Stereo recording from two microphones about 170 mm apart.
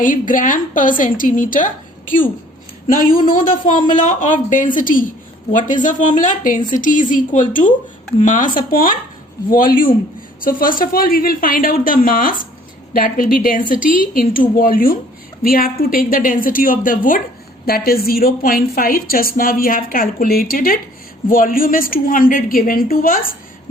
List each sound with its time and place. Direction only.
0.0 s a woman's voice: 50° left (ahead or behind)